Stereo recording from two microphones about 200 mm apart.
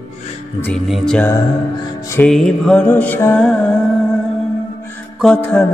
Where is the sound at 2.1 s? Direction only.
5° left (ahead or behind).